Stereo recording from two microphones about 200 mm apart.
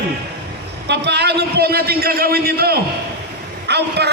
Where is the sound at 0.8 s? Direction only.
60° right (ahead or behind).